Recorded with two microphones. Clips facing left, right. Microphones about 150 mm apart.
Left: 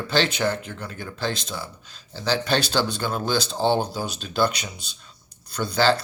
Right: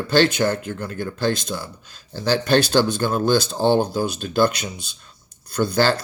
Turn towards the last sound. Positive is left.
turn(degrees=-50)  # may be behind; listen again after turning